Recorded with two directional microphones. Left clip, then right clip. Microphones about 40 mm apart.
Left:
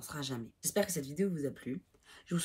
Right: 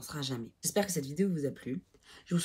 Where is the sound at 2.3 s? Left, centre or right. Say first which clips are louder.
Right 2 dB; centre.